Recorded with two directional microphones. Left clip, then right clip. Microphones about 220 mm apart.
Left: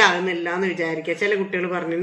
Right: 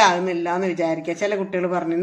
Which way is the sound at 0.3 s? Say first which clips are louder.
Right 1 dB; 45° right (ahead or behind).